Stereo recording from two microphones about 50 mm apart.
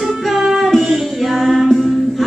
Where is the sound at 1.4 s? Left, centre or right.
Centre.